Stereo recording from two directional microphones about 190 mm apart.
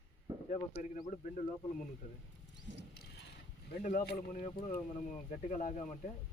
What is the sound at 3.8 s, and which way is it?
Speech, 50° left (ahead or behind).